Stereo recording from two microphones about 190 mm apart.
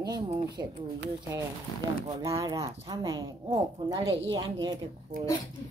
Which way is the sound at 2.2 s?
15° right (ahead or behind).